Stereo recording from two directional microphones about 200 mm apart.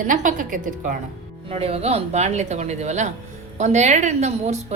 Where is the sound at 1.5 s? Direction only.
30° right (ahead or behind).